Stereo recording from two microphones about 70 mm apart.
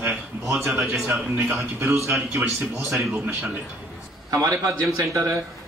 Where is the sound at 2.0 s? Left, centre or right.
Right.